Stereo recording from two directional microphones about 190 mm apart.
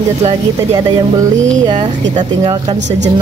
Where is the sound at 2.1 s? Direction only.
40° right (ahead or behind).